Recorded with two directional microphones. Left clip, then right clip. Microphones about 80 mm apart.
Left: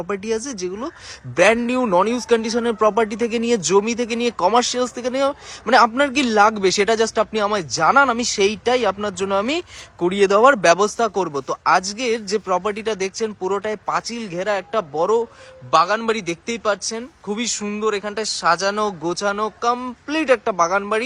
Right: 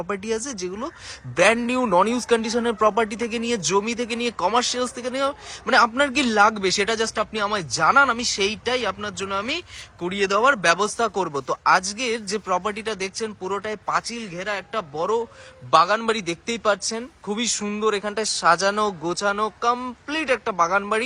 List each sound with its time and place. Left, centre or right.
0.1 s speech: left
3.8 s speech: left
6.0 s speech: left
6.6 s speech: left
7.5 s speech: left
8.2 s speech: left
11.0 s speech: left
13.4 s speech: left
13.9 s speech: left
15.7 s speech: left
20.1 s speech: left
20.5 s speech: left